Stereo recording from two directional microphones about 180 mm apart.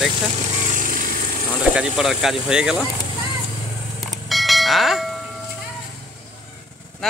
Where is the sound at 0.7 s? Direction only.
50° right (ahead or behind).